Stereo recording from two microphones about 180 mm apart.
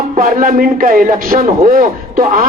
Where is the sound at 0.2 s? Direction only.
50° right (ahead or behind).